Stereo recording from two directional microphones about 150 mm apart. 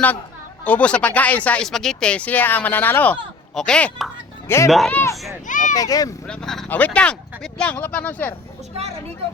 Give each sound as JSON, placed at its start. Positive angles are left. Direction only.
{"t": 0.6, "sound": "speech", "side_deg": 10}
{"t": 4.4, "sound": "speech", "side_deg": 20}
{"t": 4.7, "sound": "speech", "side_deg": 0}
{"t": 5.5, "sound": "speech", "side_deg": 60}
{"t": 5.7, "sound": "speech", "side_deg": 25}
{"t": 6.2, "sound": "speech", "side_deg": 5}